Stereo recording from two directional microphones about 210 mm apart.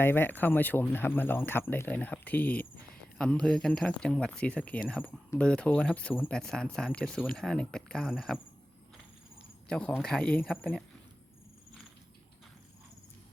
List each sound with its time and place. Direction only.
0.0 s speech: 10° left (ahead or behind)
9.6 s speech: 5° left (ahead or behind)